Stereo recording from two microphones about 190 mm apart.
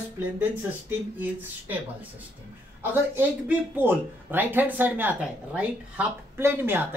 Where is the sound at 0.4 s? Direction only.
10° right (ahead or behind).